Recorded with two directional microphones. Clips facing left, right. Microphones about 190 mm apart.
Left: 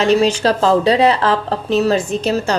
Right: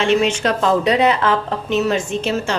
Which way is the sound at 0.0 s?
35° left (ahead or behind).